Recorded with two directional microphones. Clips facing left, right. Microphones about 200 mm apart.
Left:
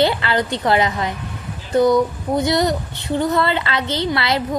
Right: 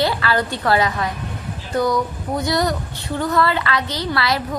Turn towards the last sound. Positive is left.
turn(degrees=25)  # may be behind; listen again after turning